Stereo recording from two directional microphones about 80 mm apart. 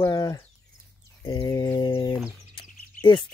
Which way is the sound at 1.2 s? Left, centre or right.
Left.